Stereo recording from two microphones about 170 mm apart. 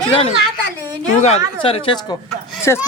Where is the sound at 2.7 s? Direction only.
15° left (ahead or behind).